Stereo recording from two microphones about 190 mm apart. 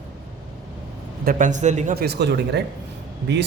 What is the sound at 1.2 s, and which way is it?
Speech, 45° right (ahead or behind).